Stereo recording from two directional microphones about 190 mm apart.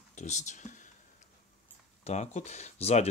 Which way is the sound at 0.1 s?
40° left (ahead or behind).